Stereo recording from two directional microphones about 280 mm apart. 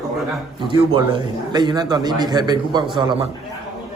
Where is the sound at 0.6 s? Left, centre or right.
Centre.